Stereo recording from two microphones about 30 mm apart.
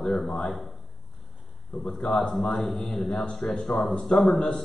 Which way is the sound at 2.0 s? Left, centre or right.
Left.